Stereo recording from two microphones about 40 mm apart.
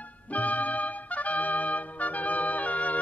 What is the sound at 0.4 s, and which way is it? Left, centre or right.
Trumpet, left.